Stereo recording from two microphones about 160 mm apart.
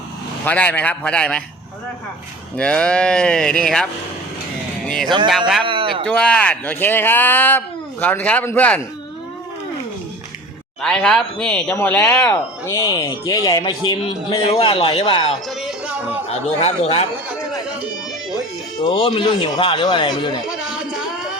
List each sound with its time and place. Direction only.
0.4 s speech: 10° left (ahead or behind)
2.6 s speech: 5° left (ahead or behind)
4.9 s speech: centre (ahead or behind)
5.6 s a sound: 30° right (ahead or behind)
6.1 s speech: 5° left (ahead or behind)
10.8 s speech: 5° left (ahead or behind); by 15.4 s 30° left (ahead or behind)
15.4 s music: centre (ahead or behind)
16.6 s speech: 40° left (ahead or behind)
17.2 s chatter: 10° right (ahead or behind)
18.8 s speech: 30° left (ahead or behind)
20.5 s music: 5° right (ahead or behind)